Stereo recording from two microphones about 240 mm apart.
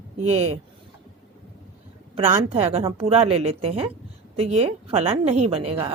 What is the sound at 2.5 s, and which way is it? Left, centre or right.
A woman's voice, right.